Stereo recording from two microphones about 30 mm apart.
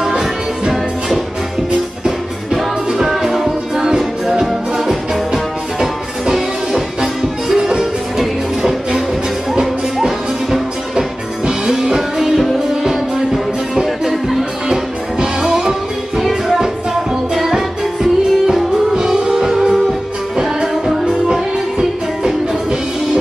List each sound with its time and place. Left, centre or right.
0.2 s music: centre
2.5 s music: centre
10.0 s music: centre
14.7 s music: right
18.9 s music: right
21.3 s music: right